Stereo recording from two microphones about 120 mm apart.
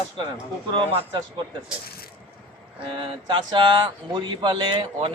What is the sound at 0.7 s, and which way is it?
Speech, 45° right (ahead or behind).